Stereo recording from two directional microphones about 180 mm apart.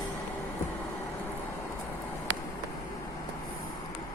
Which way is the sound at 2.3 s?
90° right.